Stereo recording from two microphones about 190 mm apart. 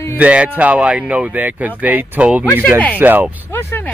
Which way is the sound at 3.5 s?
10° left (ahead or behind).